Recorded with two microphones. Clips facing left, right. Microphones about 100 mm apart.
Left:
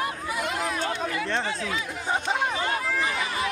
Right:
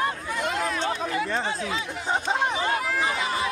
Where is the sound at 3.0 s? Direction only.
25° right (ahead or behind).